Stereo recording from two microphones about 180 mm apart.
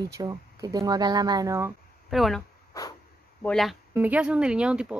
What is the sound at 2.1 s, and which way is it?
Speech, centre (ahead or behind).